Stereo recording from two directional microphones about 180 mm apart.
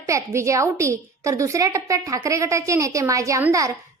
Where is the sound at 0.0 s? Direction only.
15° right (ahead or behind).